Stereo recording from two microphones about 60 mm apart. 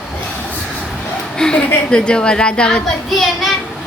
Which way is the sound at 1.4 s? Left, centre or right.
Centre.